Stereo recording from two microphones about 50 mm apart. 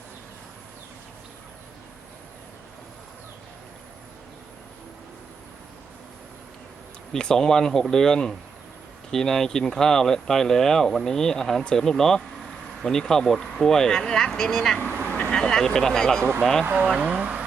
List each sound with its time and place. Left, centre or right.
7.1 s speech: centre
14.8 s vehicle: right
15.3 s speech: centre
16.6 s speech: right
16.9 s speech: right